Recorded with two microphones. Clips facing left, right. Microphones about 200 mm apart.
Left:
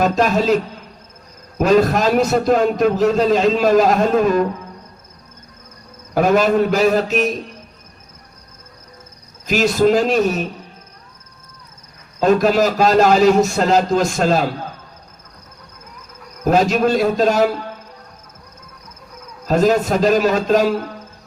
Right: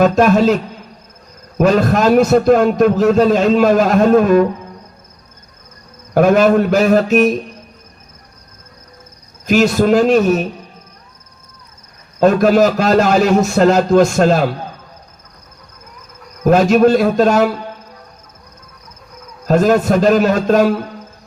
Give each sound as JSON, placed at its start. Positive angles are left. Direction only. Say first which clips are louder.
{"t": 0.0, "sound": "a man's voice", "louder": "right 5 dB", "side_deg": -50}
{"t": 1.6, "sound": "a man's voice", "louder": "right 2 dB", "side_deg": -50}
{"t": 6.1, "sound": "a man's voice", "louder": "right 4 dB", "side_deg": -55}
{"t": 9.5, "sound": "a man's voice", "louder": "right 3 dB", "side_deg": -50}
{"t": 12.2, "sound": "a man's voice", "louder": "right 4 dB", "side_deg": -50}
{"t": 16.5, "sound": "a man's voice", "louder": "right 5 dB", "side_deg": -50}
{"t": 19.5, "sound": "a man's voice", "louder": "right 3 dB", "side_deg": -50}